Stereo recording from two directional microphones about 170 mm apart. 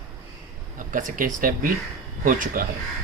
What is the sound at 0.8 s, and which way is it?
Speech, 50° right (ahead or behind).